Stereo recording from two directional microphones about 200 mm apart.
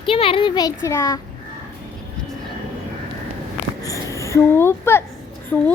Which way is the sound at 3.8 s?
15° left (ahead or behind).